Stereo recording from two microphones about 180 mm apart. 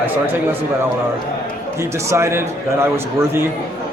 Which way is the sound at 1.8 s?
15° right (ahead or behind).